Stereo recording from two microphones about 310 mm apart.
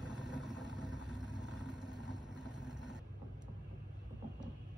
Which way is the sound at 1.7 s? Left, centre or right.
Centre.